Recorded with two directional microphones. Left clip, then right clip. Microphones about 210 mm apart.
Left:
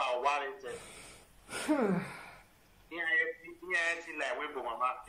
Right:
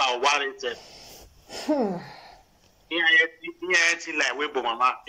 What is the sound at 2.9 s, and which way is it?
A man's voice, 50° right (ahead or behind).